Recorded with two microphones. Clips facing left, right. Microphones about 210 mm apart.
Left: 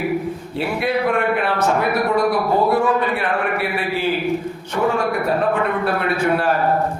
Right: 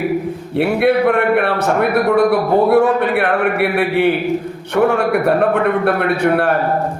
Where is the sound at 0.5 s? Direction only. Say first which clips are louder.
Right 8 dB; 65° right (ahead or behind).